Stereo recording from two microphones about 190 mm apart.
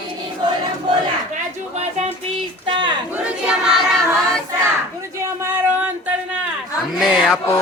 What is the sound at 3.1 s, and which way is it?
Choir, 5° right (ahead or behind).